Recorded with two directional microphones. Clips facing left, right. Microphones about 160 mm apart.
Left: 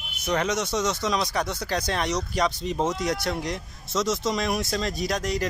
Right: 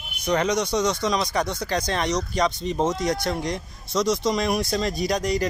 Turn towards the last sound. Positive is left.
turn(degrees=0)  # may be behind; listen again after turning